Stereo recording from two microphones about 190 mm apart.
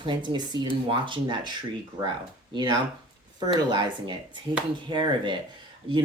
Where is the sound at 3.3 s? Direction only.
20° right (ahead or behind).